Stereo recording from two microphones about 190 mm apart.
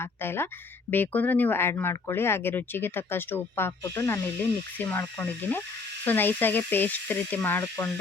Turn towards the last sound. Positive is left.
turn(degrees=10)  # may be behind; listen again after turning